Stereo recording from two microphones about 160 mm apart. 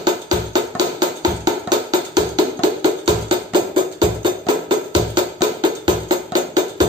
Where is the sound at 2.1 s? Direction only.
25° right (ahead or behind).